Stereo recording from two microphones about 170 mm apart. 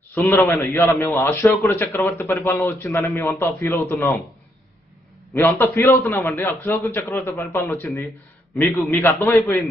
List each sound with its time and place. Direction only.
0.1 s a man's voice: 15° left (ahead or behind)
5.3 s a man's voice: 15° left (ahead or behind)